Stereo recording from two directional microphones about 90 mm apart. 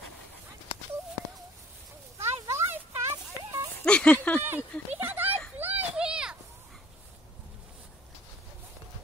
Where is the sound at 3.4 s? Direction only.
45° right (ahead or behind).